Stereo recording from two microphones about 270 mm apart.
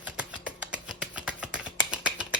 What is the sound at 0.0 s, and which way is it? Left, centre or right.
Finger snapping, centre.